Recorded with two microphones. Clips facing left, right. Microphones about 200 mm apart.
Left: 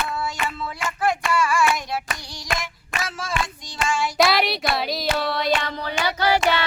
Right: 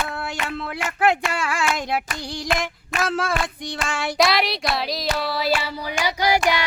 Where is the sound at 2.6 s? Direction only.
60° right (ahead or behind).